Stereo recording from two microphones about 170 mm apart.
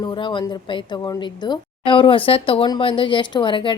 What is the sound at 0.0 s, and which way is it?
A woman's voice, 30° left (ahead or behind).